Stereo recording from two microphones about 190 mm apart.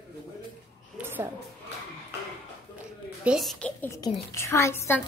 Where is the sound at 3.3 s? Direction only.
Centre (ahead or behind).